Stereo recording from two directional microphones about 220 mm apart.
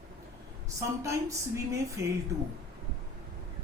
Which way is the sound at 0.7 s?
15° right (ahead or behind).